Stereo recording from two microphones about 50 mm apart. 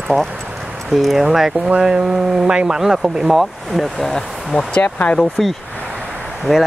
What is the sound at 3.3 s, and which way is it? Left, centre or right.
Speech, centre.